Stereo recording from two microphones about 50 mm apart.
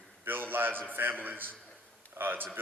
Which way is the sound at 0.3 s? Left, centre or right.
Right.